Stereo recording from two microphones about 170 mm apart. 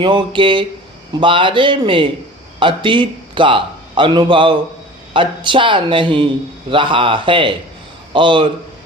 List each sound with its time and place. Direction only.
0.0 s a man's voice: 30° right (ahead or behind)